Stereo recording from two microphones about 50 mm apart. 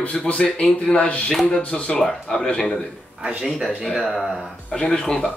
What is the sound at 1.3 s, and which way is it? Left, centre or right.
Speech, centre.